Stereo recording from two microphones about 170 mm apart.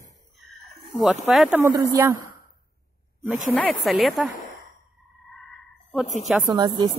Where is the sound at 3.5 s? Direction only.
5° left (ahead or behind).